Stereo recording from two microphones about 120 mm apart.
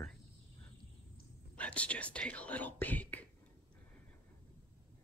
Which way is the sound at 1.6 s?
10° left (ahead or behind).